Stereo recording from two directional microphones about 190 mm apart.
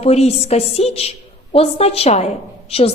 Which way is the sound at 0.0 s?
35° left (ahead or behind).